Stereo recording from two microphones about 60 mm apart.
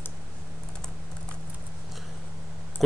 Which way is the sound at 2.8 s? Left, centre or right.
Centre.